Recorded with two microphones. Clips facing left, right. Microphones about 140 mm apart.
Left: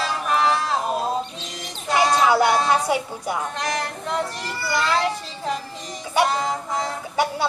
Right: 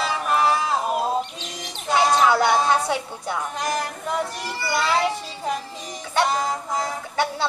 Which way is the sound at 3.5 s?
5° right (ahead or behind).